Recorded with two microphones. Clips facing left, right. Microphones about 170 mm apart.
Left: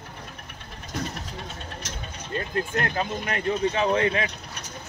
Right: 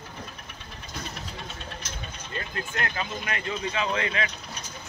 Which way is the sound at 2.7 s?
40° left (ahead or behind).